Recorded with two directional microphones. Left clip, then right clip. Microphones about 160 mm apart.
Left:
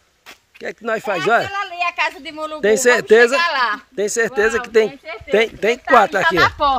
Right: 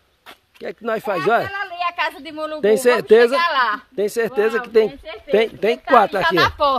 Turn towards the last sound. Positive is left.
turn(degrees=-70)  # may be behind; listen again after turning